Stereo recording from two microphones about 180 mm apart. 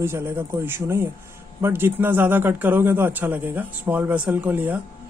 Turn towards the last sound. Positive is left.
turn(degrees=-10)  # may be behind; listen again after turning